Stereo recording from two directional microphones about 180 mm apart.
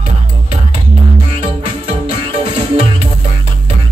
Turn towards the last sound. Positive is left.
turn(degrees=-30)  # may be behind; listen again after turning